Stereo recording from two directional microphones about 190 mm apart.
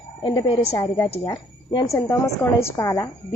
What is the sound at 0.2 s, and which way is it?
Speech, 25° left (ahead or behind).